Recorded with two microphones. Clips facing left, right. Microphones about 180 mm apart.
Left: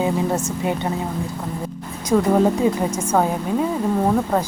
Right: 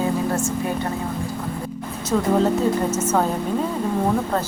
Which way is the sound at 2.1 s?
10° left (ahead or behind).